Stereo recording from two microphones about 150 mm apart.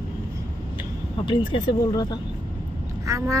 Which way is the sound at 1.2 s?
30° left (ahead or behind).